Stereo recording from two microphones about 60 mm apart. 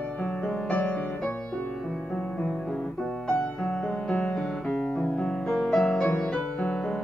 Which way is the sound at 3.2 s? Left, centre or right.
Centre.